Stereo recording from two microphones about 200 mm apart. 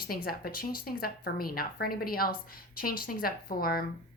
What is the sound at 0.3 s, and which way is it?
Speech, 45° left (ahead or behind).